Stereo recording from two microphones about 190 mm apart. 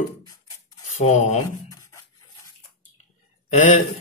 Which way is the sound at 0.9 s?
35° left (ahead or behind).